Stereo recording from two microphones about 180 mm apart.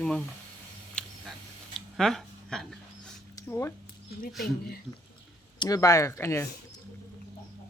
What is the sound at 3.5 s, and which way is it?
Speech, 15° left (ahead or behind).